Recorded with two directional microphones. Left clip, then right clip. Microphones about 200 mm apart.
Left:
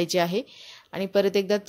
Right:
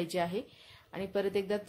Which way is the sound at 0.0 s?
30° left (ahead or behind).